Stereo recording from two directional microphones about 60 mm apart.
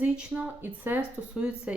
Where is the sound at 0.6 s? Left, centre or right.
Right.